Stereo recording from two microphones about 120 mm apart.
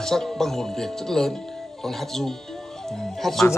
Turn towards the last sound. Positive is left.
turn(degrees=0)  # may be behind; listen again after turning